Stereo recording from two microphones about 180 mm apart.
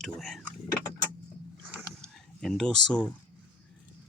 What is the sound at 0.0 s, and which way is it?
Speech, centre (ahead or behind).